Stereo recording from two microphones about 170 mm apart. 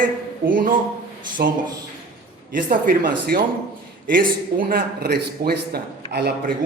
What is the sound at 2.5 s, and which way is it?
A man's voice, 55° right (ahead or behind).